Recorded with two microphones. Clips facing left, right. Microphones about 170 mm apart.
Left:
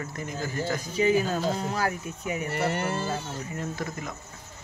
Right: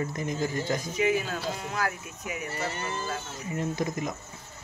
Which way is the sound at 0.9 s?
35° left (ahead or behind).